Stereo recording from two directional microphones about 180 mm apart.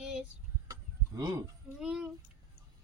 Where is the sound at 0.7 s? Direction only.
20° right (ahead or behind).